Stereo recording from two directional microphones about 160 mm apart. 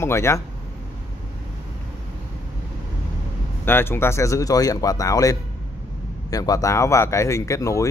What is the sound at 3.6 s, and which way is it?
A man's voice, 15° left (ahead or behind).